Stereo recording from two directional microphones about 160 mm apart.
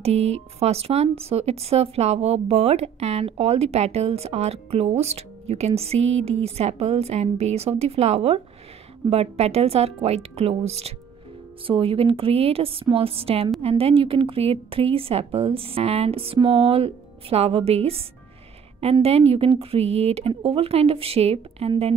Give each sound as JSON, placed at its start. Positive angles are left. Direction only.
{"t": 0.0, "sound": "speech", "side_deg": -40}
{"t": 19.0, "sound": "speech", "side_deg": -40}